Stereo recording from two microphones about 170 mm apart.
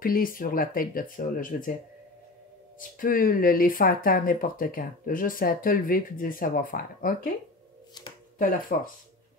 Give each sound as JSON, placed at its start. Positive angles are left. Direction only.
{"t": 0.0, "sound": "speech", "side_deg": 55}
{"t": 3.0, "sound": "speech", "side_deg": 55}
{"t": 8.4, "sound": "speech", "side_deg": 55}